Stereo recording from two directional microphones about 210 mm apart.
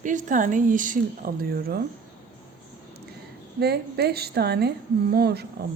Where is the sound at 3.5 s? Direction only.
50° right (ahead or behind).